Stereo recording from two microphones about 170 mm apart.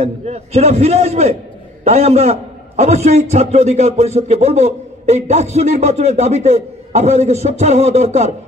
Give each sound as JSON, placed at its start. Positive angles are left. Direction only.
{"t": 0.0, "sound": "a man's voice", "side_deg": -40}